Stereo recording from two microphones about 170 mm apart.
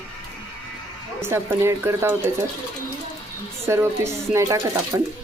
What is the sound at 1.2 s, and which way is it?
Speech, 15° right (ahead or behind).